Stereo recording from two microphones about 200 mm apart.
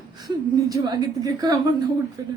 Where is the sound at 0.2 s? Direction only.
20° right (ahead or behind).